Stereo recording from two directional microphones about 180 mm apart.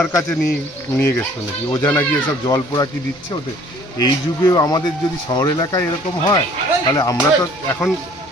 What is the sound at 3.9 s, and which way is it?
Speech, 20° left (ahead or behind).